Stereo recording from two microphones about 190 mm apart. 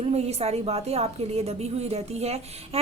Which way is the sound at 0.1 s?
35° right (ahead or behind).